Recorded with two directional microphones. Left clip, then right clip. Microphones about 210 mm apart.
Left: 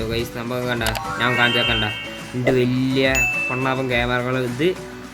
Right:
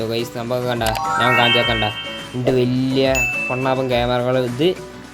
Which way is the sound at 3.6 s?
15° right (ahead or behind).